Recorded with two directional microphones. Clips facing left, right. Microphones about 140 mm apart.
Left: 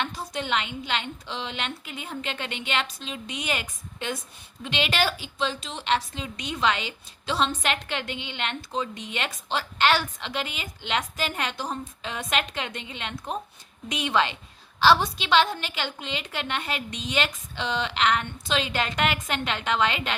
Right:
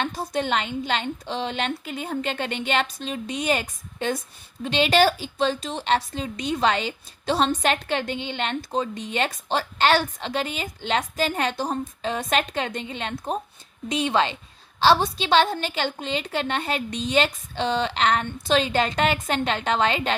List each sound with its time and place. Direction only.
0.0 s a woman's voice: 35° right (ahead or behind)